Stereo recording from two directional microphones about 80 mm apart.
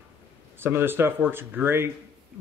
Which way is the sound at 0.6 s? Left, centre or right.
Right.